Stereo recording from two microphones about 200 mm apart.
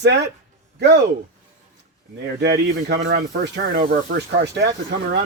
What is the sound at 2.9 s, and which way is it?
Speech, 60° right (ahead or behind).